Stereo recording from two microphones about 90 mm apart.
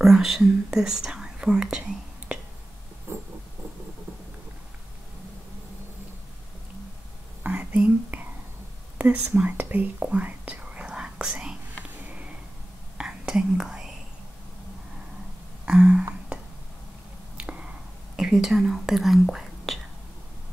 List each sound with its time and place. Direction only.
0.0 s speech: 5° right (ahead or behind)
3.1 s a sound: 30° right (ahead or behind)
7.4 s whispering: 15° right (ahead or behind)
15.6 s a sound: 10° right (ahead or behind)
17.4 s finger snapping: 15° right (ahead or behind)
18.1 s speech: 5° right (ahead or behind)